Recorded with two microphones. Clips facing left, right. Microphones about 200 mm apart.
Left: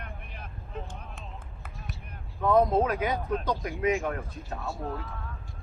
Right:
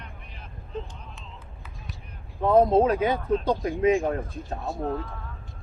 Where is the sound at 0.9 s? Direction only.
55° left (ahead or behind).